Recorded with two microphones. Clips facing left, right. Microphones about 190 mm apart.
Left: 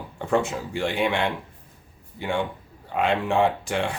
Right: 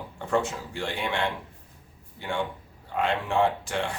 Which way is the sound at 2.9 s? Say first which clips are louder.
Left 3 dB; 15° left (ahead or behind).